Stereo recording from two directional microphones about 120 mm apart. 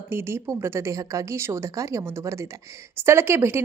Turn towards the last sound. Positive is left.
turn(degrees=-20)  # may be behind; listen again after turning